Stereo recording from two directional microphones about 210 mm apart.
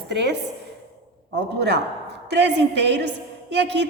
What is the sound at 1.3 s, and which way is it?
A woman's voice, 55° right (ahead or behind).